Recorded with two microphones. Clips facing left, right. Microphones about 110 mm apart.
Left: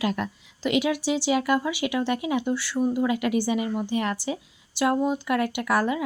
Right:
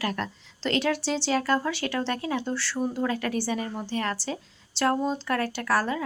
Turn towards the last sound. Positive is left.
turn(degrees=15)  # may be behind; listen again after turning